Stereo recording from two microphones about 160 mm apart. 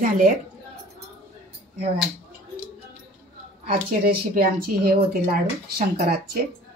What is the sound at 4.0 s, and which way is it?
Speech, 70° right (ahead or behind).